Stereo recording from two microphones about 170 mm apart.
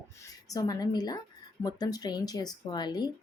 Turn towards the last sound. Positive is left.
turn(degrees=25)  # may be behind; listen again after turning